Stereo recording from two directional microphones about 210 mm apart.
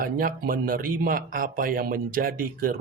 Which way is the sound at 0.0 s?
45° right (ahead or behind).